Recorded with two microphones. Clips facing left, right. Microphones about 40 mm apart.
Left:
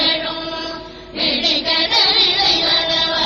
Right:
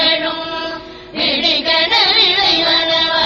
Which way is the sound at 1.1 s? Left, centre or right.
Right.